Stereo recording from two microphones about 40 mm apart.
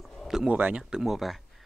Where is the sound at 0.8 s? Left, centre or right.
Centre.